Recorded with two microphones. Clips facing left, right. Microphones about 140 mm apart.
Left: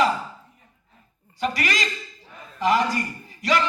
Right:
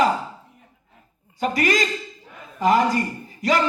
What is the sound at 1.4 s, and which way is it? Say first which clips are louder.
Speech: right 5 dB; 50° right (ahead or behind).